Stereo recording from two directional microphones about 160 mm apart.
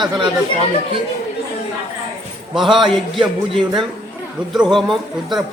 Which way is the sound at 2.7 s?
30° right (ahead or behind).